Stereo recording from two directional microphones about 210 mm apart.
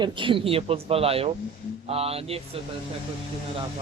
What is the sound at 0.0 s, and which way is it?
Speech, 25° right (ahead or behind).